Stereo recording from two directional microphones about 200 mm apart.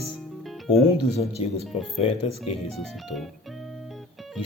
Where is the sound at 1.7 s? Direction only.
25° left (ahead or behind).